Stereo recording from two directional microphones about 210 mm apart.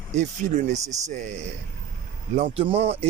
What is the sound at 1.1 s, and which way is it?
Speech, 35° right (ahead or behind).